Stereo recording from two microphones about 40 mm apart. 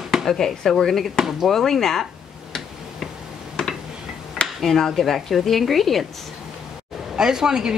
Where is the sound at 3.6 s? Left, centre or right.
Centre.